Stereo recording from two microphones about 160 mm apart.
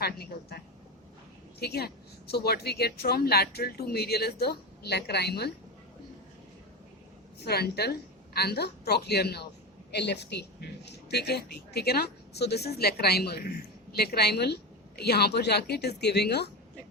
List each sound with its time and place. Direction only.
0.0 s a woman's voice: 80° left
7.3 s speech: 85° left